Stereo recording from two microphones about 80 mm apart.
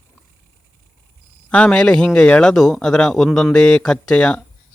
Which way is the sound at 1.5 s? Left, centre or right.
Centre.